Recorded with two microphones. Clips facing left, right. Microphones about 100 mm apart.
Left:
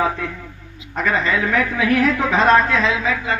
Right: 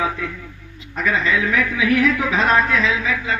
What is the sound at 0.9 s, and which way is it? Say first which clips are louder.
A man's voice: left 1 dB; 45° left (ahead or behind).